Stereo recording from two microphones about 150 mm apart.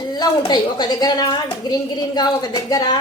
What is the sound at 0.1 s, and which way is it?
A woman's voice, 25° left (ahead or behind).